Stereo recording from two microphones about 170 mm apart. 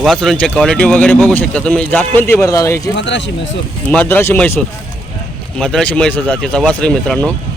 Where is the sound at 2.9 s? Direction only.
90° left.